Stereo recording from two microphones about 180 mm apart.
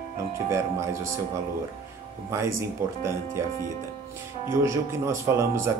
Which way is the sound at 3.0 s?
15° right (ahead or behind).